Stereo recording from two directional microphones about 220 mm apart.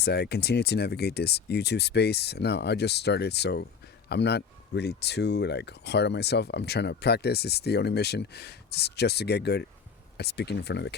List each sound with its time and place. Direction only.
0.0 s speech: 45° left (ahead or behind)